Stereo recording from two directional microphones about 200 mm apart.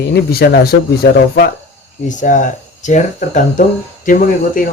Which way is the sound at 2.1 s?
40° left (ahead or behind).